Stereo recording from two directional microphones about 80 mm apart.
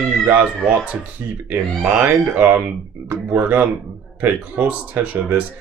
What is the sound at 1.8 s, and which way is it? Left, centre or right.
Speech, centre.